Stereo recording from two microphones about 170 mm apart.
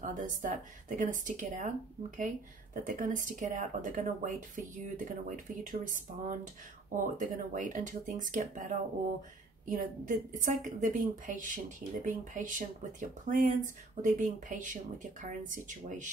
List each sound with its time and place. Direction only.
0.0 s speech: 50° right (ahead or behind)